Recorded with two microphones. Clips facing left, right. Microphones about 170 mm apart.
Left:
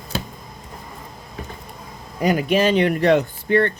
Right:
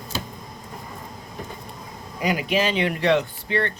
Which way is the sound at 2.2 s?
45° left (ahead or behind).